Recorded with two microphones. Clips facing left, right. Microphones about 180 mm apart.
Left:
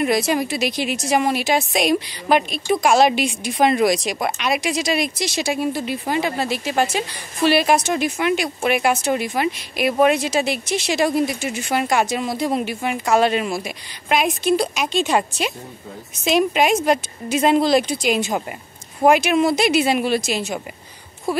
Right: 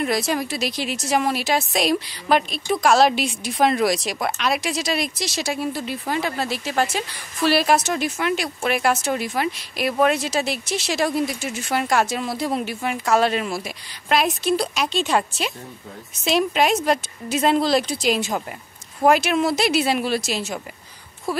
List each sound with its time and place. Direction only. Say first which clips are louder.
0.0 s speech: left 3 dB; 5° left (ahead or behind)
0.7 s a woman's voice: left 3 dB; 55° left (ahead or behind)
0.9 s speech: left 1 dB; centre (ahead or behind)